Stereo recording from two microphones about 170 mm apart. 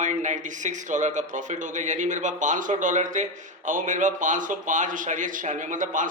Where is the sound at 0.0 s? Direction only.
45° right (ahead or behind).